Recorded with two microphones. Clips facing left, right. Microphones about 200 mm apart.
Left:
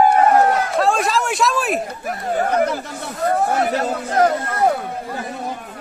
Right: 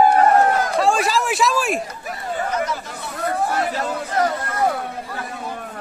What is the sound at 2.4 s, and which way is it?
Chatter, 60° left (ahead or behind).